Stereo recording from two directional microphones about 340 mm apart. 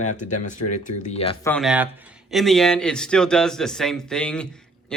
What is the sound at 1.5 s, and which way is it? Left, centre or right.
Speech, centre.